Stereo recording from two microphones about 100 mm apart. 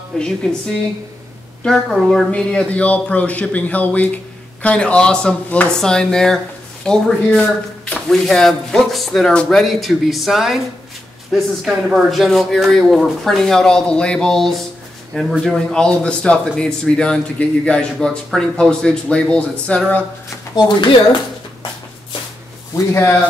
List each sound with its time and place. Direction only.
0.1 s a man's voice: 5° left (ahead or behind)
1.6 s a man's voice: centre (ahead or behind)
20.5 s speech: 50° left (ahead or behind)